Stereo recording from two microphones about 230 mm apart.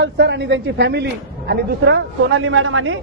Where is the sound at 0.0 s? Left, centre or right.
Right.